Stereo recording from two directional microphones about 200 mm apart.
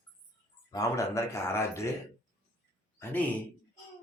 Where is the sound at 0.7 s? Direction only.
15° left (ahead or behind).